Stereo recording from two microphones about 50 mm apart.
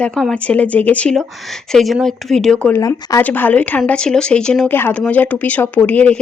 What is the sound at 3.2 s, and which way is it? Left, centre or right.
Speech, left.